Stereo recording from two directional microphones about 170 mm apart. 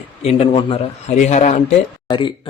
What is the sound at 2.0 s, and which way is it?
Speech, 30° left (ahead or behind).